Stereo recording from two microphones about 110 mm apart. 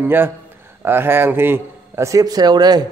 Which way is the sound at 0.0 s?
20° right (ahead or behind).